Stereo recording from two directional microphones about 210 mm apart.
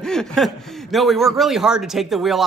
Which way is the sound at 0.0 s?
5° left (ahead or behind).